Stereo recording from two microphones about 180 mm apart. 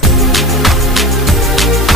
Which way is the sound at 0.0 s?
Centre (ahead or behind).